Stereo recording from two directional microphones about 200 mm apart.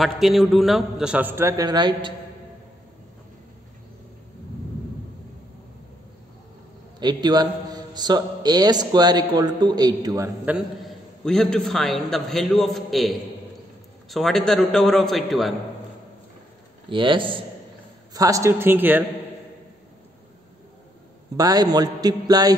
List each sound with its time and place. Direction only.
0.0 s a man's voice: centre (ahead or behind); by 2.1 s 20° right (ahead or behind)
7.0 s a man's voice: 20° right (ahead or behind); by 15.5 s centre (ahead or behind)
16.9 s a man's voice: 25° right (ahead or behind); by 19.0 s 10° right (ahead or behind)
21.4 s a man's voice: 20° right (ahead or behind)